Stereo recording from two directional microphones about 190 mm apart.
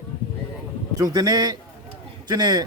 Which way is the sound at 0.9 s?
20° right (ahead or behind).